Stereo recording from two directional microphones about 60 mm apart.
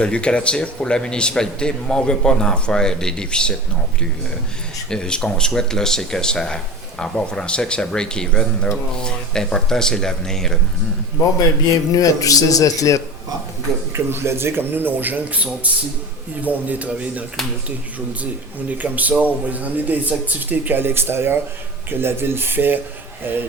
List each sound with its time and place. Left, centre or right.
0.0 s speech: centre
4.9 s speech: centre
11.9 s speech: left
13.9 s speech: right
18.8 s speech: right